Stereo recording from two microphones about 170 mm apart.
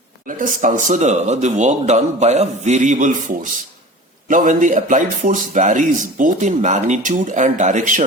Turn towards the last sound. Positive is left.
turn(degrees=-45)  # may be behind; listen again after turning